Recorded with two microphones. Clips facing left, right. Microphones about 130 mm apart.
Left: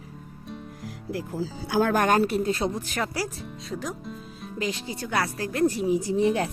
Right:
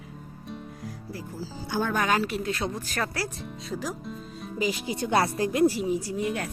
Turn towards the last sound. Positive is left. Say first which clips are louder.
# left 6 dB
turn(degrees=30)  # may be behind; listen again after turning